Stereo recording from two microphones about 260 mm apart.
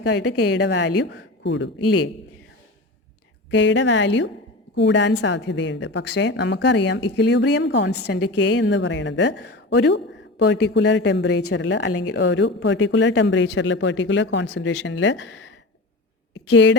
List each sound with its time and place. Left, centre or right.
0.0 s a woman's voice: left
3.5 s a woman's voice: left
16.3 s a sound: left